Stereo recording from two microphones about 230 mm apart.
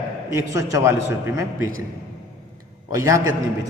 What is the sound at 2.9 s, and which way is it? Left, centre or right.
Speech, centre.